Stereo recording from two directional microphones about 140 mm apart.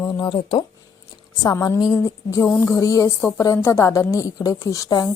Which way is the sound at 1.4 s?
25° left (ahead or behind).